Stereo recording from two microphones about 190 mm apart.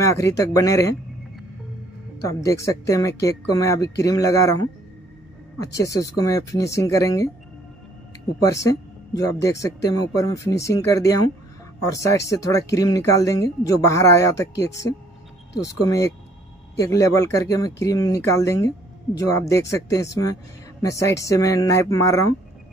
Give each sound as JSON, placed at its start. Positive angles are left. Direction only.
{"t": 0.0, "sound": "speech", "side_deg": 15}
{"t": 2.2, "sound": "speech", "side_deg": 15}
{"t": 5.7, "sound": "speech", "side_deg": 15}
{"t": 8.5, "sound": "speech", "side_deg": 15}